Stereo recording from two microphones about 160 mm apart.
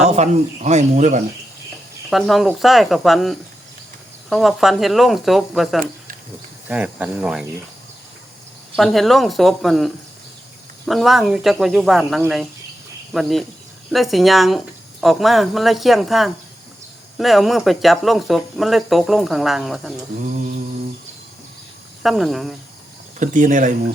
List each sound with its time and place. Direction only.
0.1 s speech: 45° right (ahead or behind)
2.0 s speech: centre (ahead or behind)
8.7 s speech: centre (ahead or behind)
22.0 s speech: centre (ahead or behind)
23.2 s speech: 50° right (ahead or behind)